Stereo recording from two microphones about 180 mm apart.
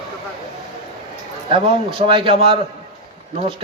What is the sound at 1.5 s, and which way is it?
A man's voice, 30° right (ahead or behind).